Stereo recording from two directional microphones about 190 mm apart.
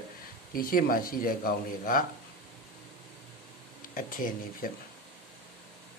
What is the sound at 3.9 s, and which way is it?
Speech, 45° left (ahead or behind).